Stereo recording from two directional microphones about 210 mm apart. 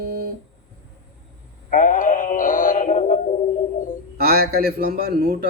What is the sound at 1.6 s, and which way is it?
Synthetic singing, 40° left (ahead or behind).